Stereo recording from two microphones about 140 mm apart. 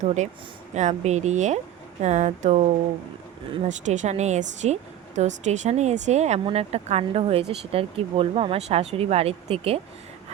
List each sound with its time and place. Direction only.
0.0 s speech: 55° right (ahead or behind)
3.7 s speech: 60° right (ahead or behind)